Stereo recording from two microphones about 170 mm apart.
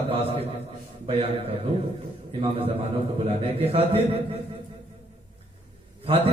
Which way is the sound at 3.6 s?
35° right (ahead or behind).